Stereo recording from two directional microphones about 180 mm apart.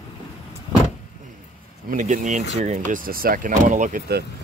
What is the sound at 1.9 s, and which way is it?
Speech, 45° right (ahead or behind).